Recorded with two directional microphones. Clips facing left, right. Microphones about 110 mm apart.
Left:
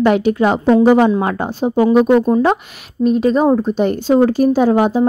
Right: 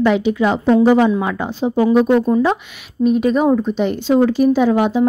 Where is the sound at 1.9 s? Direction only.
15° left (ahead or behind).